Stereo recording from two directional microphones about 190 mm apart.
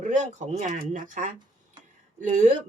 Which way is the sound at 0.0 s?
40° right (ahead or behind).